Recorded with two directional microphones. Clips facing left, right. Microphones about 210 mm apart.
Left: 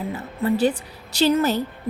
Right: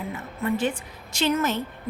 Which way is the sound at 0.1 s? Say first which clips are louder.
Left 4 dB; 35° left (ahead or behind).